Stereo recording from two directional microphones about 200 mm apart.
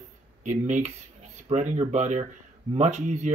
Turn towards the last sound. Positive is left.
turn(degrees=-35)  # may be behind; listen again after turning